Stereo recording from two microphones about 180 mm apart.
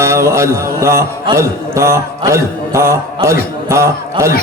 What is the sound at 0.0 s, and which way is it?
Mantra, 15° right (ahead or behind).